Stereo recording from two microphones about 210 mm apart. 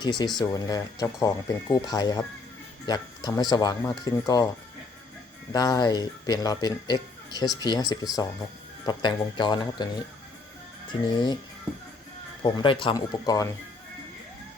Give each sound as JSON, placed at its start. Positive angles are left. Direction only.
{"t": 0.0, "sound": "speech", "side_deg": 20}
{"t": 5.5, "sound": "speech", "side_deg": 20}
{"t": 11.1, "sound": "speech", "side_deg": 20}
{"t": 12.4, "sound": "speech", "side_deg": 20}